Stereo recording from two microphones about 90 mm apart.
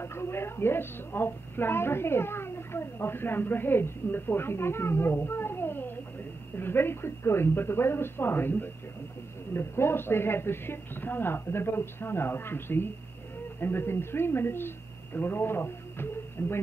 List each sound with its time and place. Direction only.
0.0 s a woman's voice: 25° left (ahead or behind)